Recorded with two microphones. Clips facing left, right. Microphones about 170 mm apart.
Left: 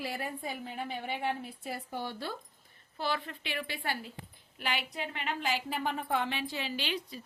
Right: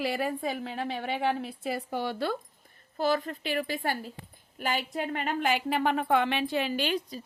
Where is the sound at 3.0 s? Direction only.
40° right (ahead or behind).